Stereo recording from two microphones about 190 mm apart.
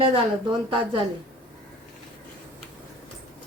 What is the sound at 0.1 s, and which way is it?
Speech, 25° right (ahead or behind).